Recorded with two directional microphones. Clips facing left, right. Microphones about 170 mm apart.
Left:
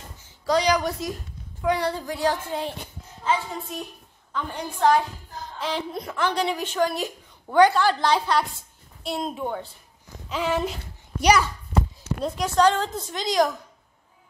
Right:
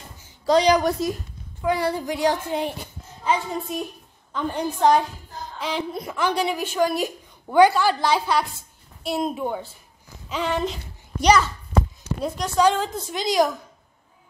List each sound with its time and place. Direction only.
0.5 s a woman's voice: 25° right (ahead or behind)
1.6 s a woman's voice: 5° right (ahead or behind); by 5.0 s 20° right (ahead or behind)
5.6 s a woman's voice: centre (ahead or behind)
10.3 s a child's voice: 5° left (ahead or behind)
12.2 s a woman's voice: 5° right (ahead or behind)